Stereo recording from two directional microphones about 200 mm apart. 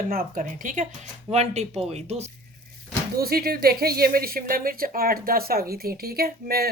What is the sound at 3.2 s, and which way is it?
Speech, 50° right (ahead or behind).